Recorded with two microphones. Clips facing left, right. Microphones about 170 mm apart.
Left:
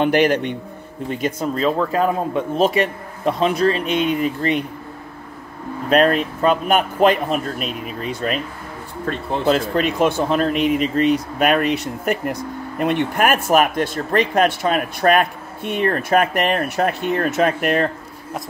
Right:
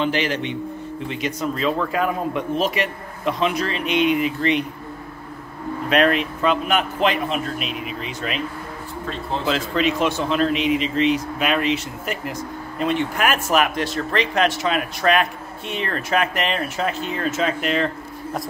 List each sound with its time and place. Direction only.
0.0 s a man's voice: 55° left (ahead or behind)
5.9 s speech: 40° left (ahead or behind)
9.4 s speech: 50° left (ahead or behind)